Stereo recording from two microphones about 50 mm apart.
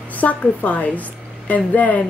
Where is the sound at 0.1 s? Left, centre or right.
Left.